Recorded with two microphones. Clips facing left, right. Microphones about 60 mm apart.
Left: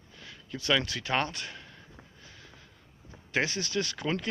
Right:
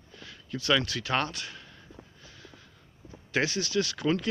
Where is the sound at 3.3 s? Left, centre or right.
Left.